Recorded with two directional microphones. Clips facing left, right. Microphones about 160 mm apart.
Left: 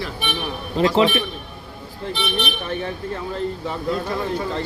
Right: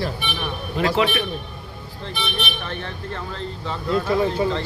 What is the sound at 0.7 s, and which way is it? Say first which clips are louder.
Speech: left 3 dB; 30° left (ahead or behind).